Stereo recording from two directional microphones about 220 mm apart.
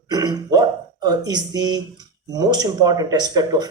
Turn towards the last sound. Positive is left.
turn(degrees=-20)  # may be behind; listen again after turning